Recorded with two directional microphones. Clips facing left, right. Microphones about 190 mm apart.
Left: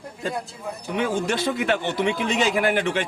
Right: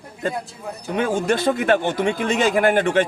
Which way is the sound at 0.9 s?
50° right (ahead or behind).